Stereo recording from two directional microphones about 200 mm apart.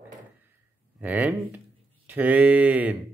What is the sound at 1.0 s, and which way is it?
Speech, 10° right (ahead or behind).